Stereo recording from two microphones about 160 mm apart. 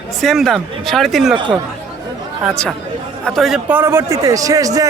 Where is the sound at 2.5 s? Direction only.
5° left (ahead or behind).